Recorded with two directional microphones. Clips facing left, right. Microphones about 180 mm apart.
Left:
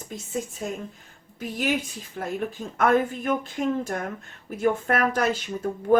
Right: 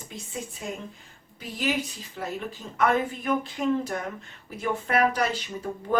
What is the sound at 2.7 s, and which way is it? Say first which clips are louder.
Speech: left 3 dB; 50° left (ahead or behind).